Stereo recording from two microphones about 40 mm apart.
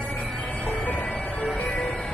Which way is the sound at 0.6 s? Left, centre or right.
Left.